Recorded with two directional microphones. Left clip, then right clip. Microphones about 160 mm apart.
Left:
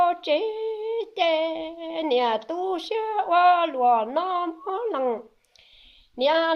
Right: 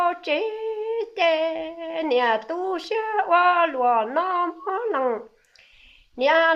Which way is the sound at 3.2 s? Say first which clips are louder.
Even; 40° left (ahead or behind).